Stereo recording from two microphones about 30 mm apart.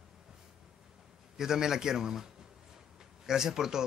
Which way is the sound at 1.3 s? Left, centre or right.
Centre.